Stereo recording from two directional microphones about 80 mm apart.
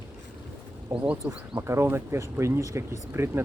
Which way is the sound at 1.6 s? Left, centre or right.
Right.